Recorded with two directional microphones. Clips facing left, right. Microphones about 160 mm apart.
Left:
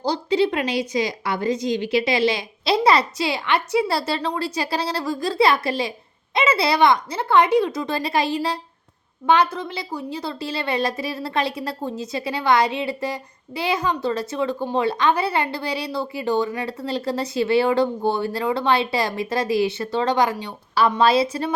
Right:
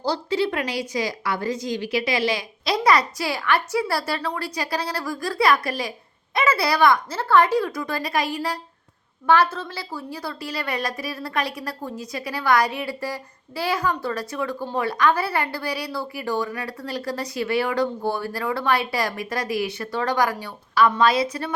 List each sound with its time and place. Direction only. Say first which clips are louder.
0.0 s a woman's voice: left 3 dB; 20° left (ahead or behind)